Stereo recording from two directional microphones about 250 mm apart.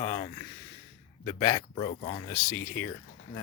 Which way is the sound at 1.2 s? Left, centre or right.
Centre.